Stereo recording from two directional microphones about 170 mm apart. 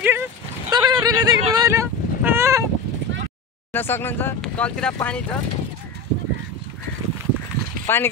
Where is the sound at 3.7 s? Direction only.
15° left (ahead or behind).